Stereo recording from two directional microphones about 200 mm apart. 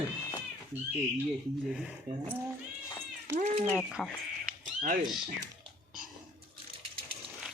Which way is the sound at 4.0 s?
5° left (ahead or behind).